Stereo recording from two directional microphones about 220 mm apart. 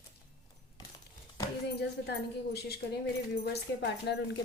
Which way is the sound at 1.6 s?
50° left (ahead or behind).